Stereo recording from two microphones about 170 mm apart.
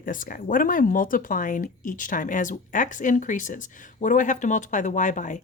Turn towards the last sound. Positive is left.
turn(degrees=50)  # may be behind; listen again after turning